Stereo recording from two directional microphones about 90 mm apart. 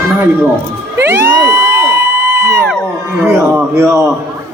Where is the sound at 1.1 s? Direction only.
30° right (ahead or behind).